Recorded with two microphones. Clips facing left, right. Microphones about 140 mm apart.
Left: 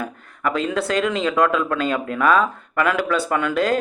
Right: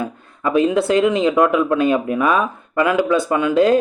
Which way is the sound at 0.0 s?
20° right (ahead or behind).